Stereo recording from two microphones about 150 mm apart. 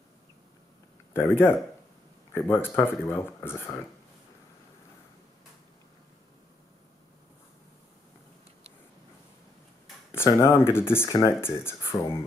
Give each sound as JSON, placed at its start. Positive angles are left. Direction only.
{"t": 1.1, "sound": "speech", "side_deg": 15}
{"t": 10.1, "sound": "speech", "side_deg": 20}